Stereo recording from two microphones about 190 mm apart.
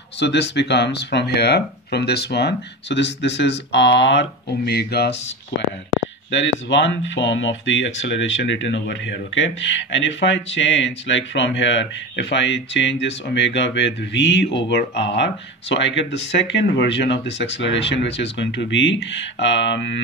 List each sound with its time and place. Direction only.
0.2 s speech: 65° left (ahead or behind)
6.3 s speech: 70° left (ahead or behind)